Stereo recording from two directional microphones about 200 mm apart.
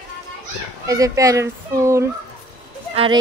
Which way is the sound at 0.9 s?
15° right (ahead or behind).